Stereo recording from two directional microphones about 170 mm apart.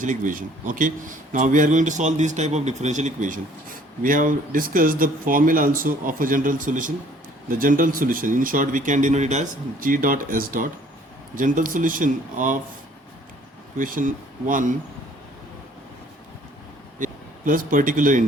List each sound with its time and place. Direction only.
0.0 s a man's voice: 50° right (ahead or behind)
13.7 s a man's voice: 55° right (ahead or behind)
17.0 s speech: 55° right (ahead or behind)